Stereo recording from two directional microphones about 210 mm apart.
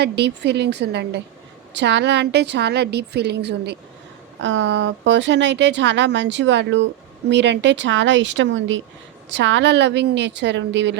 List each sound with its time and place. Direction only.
0.0 s a woman's voice: 55° right (ahead or behind)